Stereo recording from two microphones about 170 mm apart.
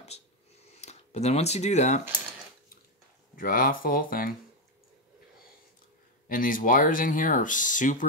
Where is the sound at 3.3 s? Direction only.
55° left (ahead or behind).